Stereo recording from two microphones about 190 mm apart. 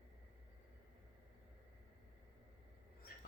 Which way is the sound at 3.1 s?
50° left (ahead or behind).